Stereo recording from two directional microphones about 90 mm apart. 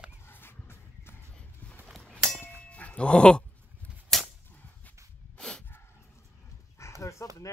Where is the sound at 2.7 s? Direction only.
15° left (ahead or behind).